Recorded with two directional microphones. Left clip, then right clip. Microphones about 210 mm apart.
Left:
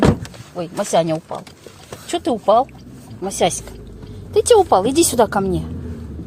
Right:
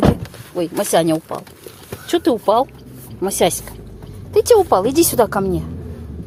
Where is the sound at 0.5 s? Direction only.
15° right (ahead or behind).